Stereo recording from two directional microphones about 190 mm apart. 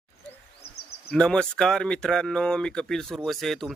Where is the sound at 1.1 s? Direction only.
5° left (ahead or behind).